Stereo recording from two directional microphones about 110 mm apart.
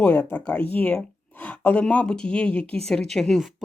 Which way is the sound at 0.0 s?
15° left (ahead or behind).